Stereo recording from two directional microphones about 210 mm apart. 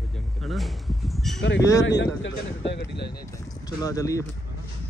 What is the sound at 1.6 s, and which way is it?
Speech, 15° left (ahead or behind).